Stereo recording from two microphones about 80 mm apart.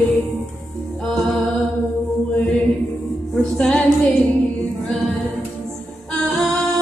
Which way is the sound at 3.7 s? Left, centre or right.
Centre.